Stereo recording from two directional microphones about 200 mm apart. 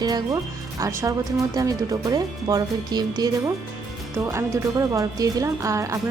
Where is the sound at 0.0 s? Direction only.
20° right (ahead or behind).